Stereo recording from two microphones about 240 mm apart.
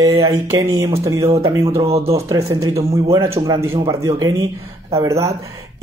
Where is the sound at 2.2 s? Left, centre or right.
Centre.